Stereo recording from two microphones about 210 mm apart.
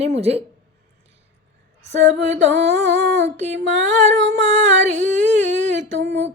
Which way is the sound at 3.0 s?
55° right (ahead or behind).